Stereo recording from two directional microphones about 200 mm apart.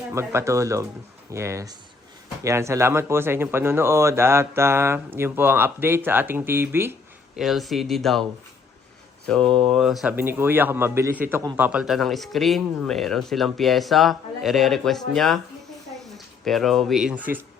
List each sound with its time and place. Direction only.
0.1 s speech: 15° right (ahead or behind)
7.3 s a man's voice: centre (ahead or behind)
9.4 s speech: 25° right (ahead or behind)
9.7 s a man's voice: centre (ahead or behind)